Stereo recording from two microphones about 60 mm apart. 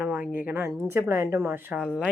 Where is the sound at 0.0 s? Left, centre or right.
Right.